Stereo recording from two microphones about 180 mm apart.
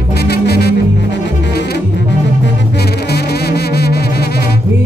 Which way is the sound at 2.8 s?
60° left (ahead or behind).